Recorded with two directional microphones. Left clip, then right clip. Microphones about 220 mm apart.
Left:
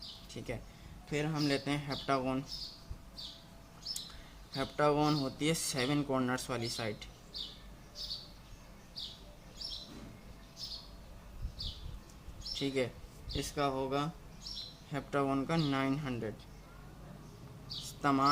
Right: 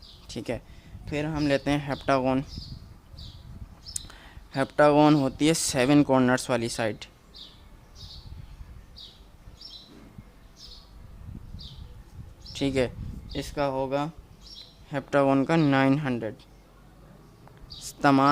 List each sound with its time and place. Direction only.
0.3 s speech: 45° right (ahead or behind)
4.5 s speech: 45° right (ahead or behind)
12.5 s speech: 45° right (ahead or behind)
17.8 s a sound: 45° right (ahead or behind)